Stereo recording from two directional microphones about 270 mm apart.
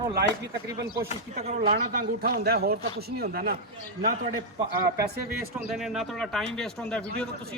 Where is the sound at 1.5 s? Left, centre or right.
Right.